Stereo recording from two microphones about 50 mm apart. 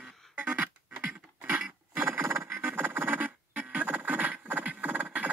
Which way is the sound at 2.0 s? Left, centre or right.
Right.